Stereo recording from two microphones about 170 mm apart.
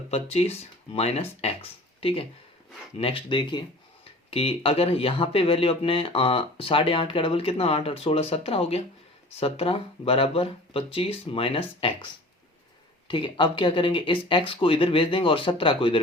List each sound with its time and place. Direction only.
0.1 s speech: 35° left (ahead or behind)
13.1 s speech: 30° left (ahead or behind)